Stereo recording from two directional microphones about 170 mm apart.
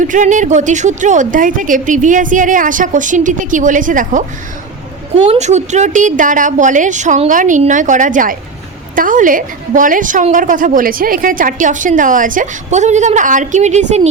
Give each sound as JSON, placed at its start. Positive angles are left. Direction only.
{"t": 0.0, "sound": "a woman's voice", "side_deg": -50}
{"t": 5.2, "sound": "a woman's voice", "side_deg": -40}